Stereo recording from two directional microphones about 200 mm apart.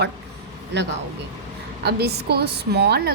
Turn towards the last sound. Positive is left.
turn(degrees=-50)  # may be behind; listen again after turning